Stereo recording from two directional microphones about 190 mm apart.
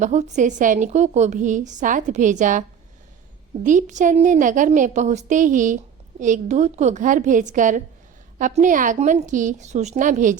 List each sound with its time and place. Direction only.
0.0 s a woman's voice: 40° right (ahead or behind)